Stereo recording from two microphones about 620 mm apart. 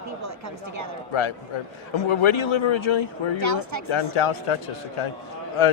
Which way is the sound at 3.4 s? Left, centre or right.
Right.